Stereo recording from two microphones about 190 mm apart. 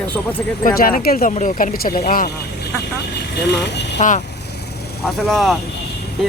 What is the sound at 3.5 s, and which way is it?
Speech, 60° left (ahead or behind).